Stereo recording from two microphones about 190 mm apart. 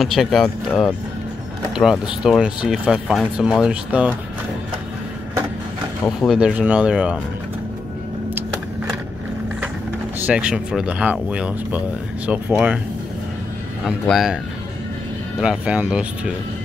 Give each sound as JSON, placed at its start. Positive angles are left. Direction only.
{"t": 0.0, "sound": "speech", "side_deg": 0}
{"t": 6.2, "sound": "speech", "side_deg": -5}
{"t": 10.2, "sound": "speech", "side_deg": -5}
{"t": 13.8, "sound": "speech", "side_deg": 0}
{"t": 15.4, "sound": "speech", "side_deg": -5}